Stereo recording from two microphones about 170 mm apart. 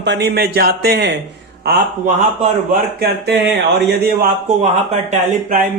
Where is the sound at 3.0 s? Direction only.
70° right (ahead or behind).